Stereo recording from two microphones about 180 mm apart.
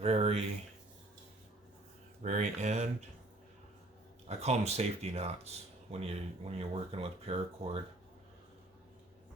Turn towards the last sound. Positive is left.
turn(degrees=-30)  # may be behind; listen again after turning